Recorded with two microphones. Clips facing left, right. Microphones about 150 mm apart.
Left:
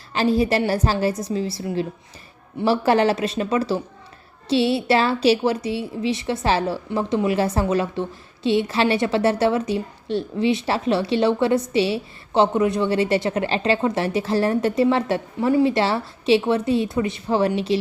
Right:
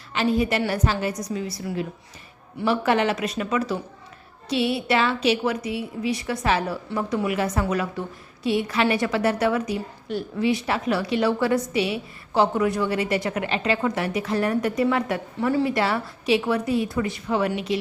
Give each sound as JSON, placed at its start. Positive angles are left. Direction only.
{"t": 0.1, "sound": "a woman's voice", "side_deg": 35}